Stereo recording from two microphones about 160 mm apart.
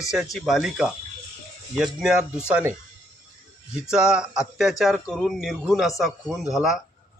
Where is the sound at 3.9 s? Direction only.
5° right (ahead or behind).